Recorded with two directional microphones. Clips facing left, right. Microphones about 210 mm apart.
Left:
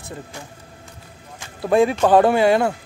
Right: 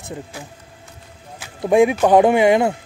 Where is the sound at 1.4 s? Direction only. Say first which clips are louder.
Right 2 dB; 15° right (ahead or behind).